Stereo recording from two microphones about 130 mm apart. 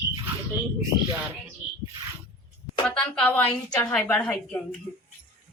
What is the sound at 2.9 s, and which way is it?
A woman's voice, 10° left (ahead or behind).